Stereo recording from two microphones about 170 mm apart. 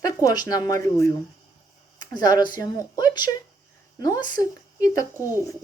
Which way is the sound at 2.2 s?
25° left (ahead or behind).